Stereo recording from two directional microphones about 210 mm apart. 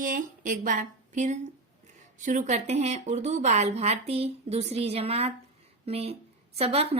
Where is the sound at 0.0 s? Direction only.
40° right (ahead or behind).